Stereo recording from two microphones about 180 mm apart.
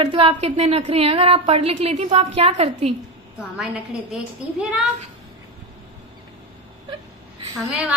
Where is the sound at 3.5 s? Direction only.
5° right (ahead or behind).